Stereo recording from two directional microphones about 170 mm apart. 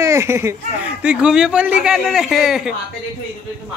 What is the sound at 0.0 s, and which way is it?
Speech, 15° right (ahead or behind).